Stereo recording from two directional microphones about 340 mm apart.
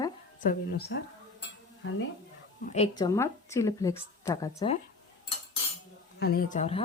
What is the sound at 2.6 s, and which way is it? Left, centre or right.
A woman's voice, centre.